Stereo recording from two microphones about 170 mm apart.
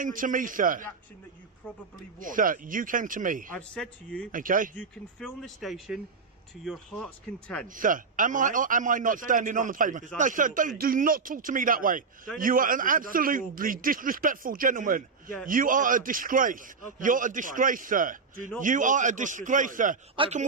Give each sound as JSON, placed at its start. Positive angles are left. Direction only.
{"t": 0.0, "sound": "a man's voice", "side_deg": -50}
{"t": 1.6, "sound": "speech", "side_deg": 10}
{"t": 2.1, "sound": "a man's voice", "side_deg": -50}
{"t": 3.5, "sound": "speech", "side_deg": 5}
{"t": 4.3, "sound": "a man's voice", "side_deg": -50}
{"t": 4.7, "sound": "speech", "side_deg": 5}
{"t": 7.7, "sound": "a man's voice", "side_deg": -50}
{"t": 20.2, "sound": "speech", "side_deg": -30}